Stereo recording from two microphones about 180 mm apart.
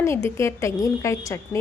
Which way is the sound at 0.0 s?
15° left (ahead or behind).